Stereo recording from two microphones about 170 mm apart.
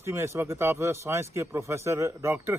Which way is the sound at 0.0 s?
15° right (ahead or behind).